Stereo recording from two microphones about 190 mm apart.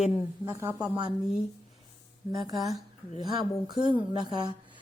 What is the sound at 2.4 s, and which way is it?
A woman's voice, 20° right (ahead or behind).